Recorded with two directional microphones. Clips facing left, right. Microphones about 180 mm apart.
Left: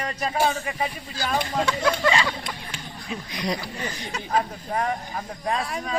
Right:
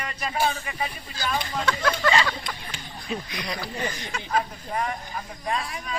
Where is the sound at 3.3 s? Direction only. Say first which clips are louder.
Left 5 dB; 35° left (ahead or behind).